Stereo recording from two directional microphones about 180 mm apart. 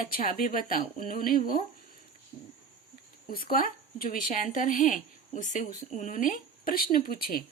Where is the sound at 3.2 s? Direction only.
55° left (ahead or behind).